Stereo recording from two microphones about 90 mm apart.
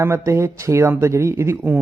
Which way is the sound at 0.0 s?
30° right (ahead or behind).